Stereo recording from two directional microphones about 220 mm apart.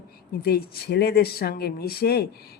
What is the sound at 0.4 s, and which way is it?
Speech, 45° left (ahead or behind).